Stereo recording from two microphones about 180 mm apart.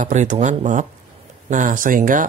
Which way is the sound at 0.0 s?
45° right (ahead or behind).